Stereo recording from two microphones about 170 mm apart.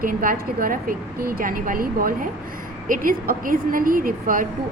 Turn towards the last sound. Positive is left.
turn(degrees=-55)  # may be behind; listen again after turning